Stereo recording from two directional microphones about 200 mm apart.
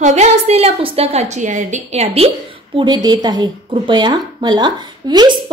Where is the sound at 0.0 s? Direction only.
35° right (ahead or behind).